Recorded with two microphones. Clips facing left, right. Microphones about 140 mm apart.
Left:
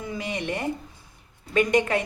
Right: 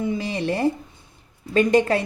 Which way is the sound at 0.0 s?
30° right (ahead or behind).